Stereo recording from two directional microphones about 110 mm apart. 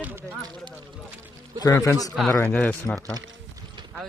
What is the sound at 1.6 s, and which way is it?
Speech, 30° left (ahead or behind).